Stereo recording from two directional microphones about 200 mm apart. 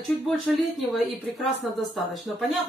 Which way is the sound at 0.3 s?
Centre (ahead or behind).